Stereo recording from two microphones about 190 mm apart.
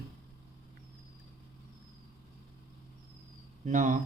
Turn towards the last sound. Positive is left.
turn(degrees=-40)  # may be behind; listen again after turning